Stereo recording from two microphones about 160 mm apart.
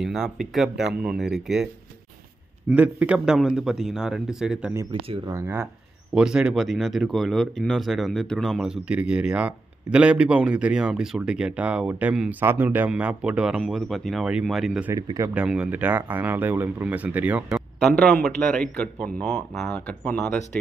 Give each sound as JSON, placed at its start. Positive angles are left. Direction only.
{"t": 0.0, "sound": "speech", "side_deg": 0}
{"t": 2.7, "sound": "speech", "side_deg": -10}
{"t": 14.9, "sound": "speech", "side_deg": -20}
{"t": 15.3, "sound": "speech", "side_deg": -5}
{"t": 17.7, "sound": "speech", "side_deg": 5}